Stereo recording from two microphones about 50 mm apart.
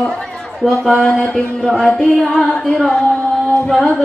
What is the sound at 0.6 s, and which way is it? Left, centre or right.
Speech, centre.